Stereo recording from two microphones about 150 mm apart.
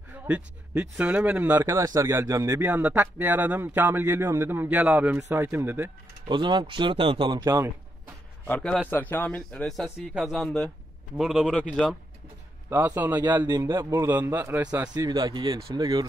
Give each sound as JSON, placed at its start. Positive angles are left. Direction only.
{"t": 0.1, "sound": "speech", "side_deg": -10}
{"t": 6.2, "sound": "speech", "side_deg": -30}
{"t": 8.5, "sound": "a man's voice", "side_deg": 10}
{"t": 12.6, "sound": "speech", "side_deg": -15}
{"t": 13.5, "sound": "speech", "side_deg": -30}
{"t": 15.0, "sound": "speech", "side_deg": -30}